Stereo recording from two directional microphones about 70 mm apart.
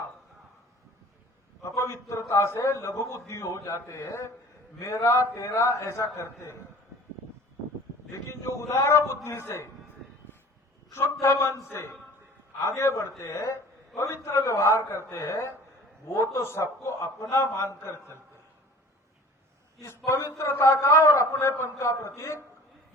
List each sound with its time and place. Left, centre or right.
1.6 s a man's voice: left
8.3 s a man's voice: left
10.3 s a sound: left
11.2 s a man's voice: left
20.1 s a man's voice: left